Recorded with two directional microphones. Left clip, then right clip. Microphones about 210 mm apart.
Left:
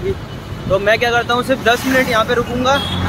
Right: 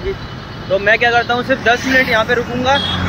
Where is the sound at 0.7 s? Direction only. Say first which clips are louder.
Right 2 dB; 15° left (ahead or behind).